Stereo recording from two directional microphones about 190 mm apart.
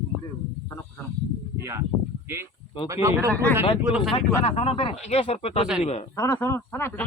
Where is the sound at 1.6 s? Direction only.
15° right (ahead or behind).